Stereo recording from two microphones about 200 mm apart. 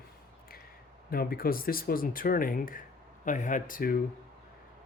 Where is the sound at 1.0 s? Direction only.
45° left (ahead or behind).